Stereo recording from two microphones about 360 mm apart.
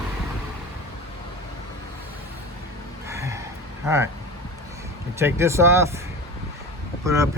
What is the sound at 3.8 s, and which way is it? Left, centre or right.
Speech, centre.